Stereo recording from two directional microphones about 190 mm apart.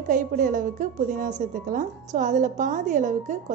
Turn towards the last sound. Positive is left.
turn(degrees=-40)  # may be behind; listen again after turning